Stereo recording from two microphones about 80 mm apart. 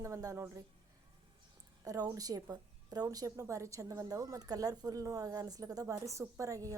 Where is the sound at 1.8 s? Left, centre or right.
Right.